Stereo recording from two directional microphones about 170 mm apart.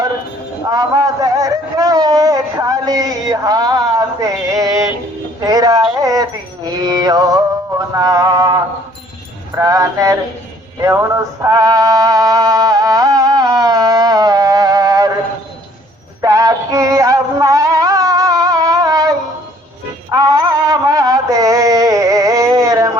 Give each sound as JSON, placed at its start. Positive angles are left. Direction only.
{"t": 0.7, "sound": "speech", "side_deg": -20}
{"t": 5.5, "sound": "a sound", "side_deg": -20}
{"t": 10.8, "sound": "music", "side_deg": -20}
{"t": 16.2, "sound": "music", "side_deg": -20}